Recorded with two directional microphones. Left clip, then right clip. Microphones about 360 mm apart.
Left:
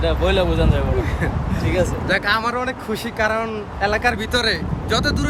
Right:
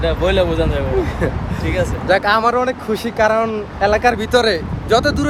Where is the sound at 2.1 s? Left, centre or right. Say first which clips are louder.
Right 8 dB; centre.